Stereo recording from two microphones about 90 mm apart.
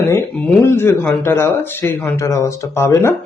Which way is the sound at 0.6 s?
30° left (ahead or behind).